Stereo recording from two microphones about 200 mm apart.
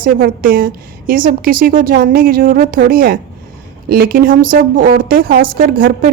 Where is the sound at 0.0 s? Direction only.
45° right (ahead or behind).